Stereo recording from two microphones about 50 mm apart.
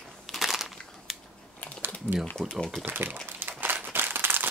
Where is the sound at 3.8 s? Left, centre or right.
Right.